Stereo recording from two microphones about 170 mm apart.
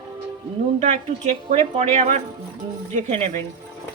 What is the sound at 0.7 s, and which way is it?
A woman's voice, 40° right (ahead or behind).